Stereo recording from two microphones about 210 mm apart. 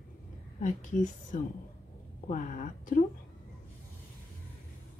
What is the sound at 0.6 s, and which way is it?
Speech, 35° left (ahead or behind).